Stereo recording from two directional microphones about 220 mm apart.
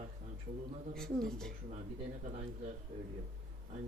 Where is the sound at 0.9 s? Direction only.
Centre (ahead or behind).